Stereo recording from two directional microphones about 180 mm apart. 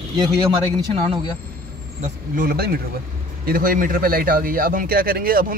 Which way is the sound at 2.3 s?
55° right (ahead or behind).